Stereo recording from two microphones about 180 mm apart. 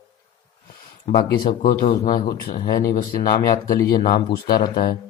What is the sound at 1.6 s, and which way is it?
Speech, 50° left (ahead or behind).